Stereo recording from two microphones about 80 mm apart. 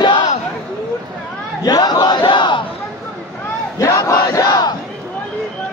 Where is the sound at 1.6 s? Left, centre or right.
Left.